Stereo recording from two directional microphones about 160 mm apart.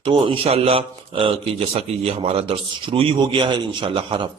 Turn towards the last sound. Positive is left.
turn(degrees=-30)  # may be behind; listen again after turning